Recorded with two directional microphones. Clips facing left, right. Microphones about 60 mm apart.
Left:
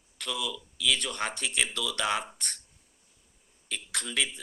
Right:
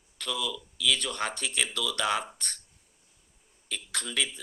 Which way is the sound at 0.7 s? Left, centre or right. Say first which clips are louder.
Even; left.